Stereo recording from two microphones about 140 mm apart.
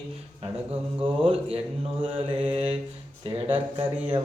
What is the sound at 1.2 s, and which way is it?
Speech, 45° right (ahead or behind).